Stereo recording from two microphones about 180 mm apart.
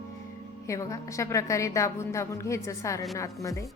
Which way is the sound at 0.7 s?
15° left (ahead or behind).